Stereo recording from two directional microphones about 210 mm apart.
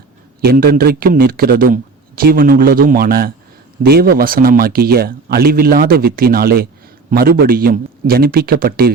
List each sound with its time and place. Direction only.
0.4 s a man's voice: 45° right (ahead or behind)